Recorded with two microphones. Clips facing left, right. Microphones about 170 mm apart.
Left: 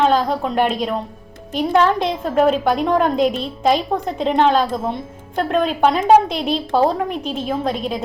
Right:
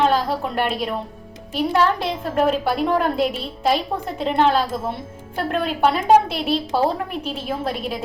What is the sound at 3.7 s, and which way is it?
A woman's voice, 45° left (ahead or behind).